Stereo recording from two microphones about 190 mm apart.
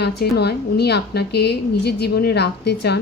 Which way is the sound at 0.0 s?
60° left (ahead or behind).